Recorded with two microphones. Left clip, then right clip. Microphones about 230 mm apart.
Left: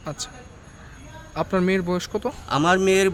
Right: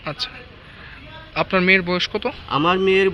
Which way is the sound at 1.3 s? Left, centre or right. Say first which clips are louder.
Right 6 dB; centre.